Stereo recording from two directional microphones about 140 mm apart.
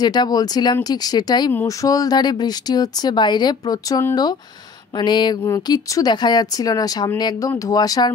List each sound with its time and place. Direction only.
0.0 s speech: 30° left (ahead or behind)